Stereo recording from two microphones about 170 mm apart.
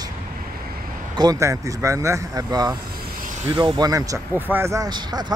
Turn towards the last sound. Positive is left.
turn(degrees=-25)  # may be behind; listen again after turning